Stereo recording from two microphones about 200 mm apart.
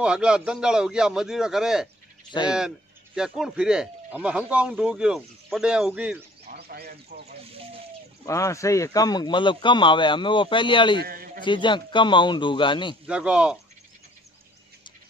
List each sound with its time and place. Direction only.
0.0 s speech: 5° right (ahead or behind)
3.2 s speech: centre (ahead or behind)
6.4 s bird: 50° right (ahead or behind)
8.3 s speech: 15° left (ahead or behind)
11.0 s a man's voice: 45° right (ahead or behind)
11.4 s speech: 25° left (ahead or behind)
13.0 s speech: 5° right (ahead or behind)